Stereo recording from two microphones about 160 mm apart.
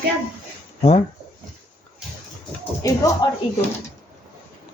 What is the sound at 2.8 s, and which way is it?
Speech, 20° left (ahead or behind).